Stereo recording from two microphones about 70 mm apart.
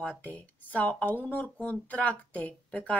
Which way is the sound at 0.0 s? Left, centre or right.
Centre.